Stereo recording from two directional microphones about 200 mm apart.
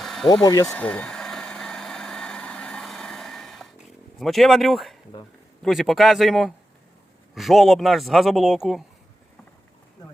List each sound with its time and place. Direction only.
0.0 s tools: centre (ahead or behind)
0.4 s speech: 15° left (ahead or behind)
0.7 s a sound: 5° left (ahead or behind)
5.6 s a man's voice: centre (ahead or behind)